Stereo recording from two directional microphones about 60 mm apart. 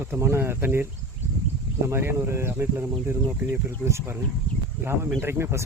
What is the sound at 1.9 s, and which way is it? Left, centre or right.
Speech, right.